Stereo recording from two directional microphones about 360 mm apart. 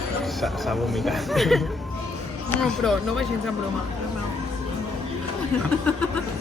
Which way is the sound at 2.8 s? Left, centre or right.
Centre.